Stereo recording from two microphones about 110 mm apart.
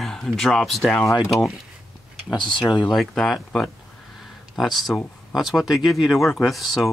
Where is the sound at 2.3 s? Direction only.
45° left (ahead or behind).